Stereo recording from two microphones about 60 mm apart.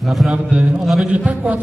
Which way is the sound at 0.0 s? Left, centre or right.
Centre.